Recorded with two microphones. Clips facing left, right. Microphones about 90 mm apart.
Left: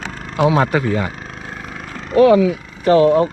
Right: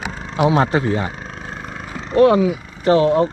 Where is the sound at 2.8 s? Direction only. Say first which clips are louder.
Left 2 dB; centre (ahead or behind).